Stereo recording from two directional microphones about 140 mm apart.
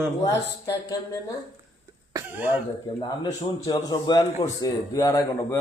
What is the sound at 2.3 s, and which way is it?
Speech, 10° right (ahead or behind).